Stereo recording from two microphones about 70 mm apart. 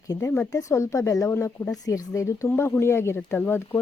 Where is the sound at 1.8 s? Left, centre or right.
Left.